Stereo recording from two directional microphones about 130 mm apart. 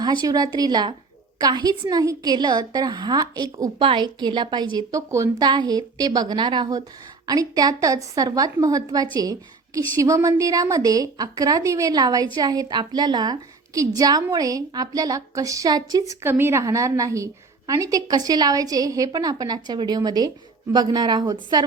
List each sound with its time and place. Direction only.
0.0 s a woman's voice: 30° right (ahead or behind)